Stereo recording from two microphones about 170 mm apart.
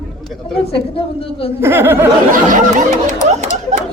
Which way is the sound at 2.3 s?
50° right (ahead or behind).